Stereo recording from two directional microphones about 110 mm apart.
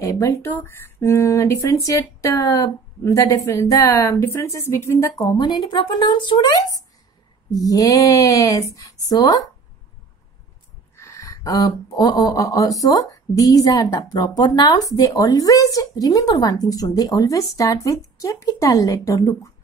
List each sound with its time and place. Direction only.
0.0 s speech: 30° left (ahead or behind)
0.5 s speech: 20° left (ahead or behind)
5.4 s speech: 45° left (ahead or behind)
11.0 s speech: 30° left (ahead or behind)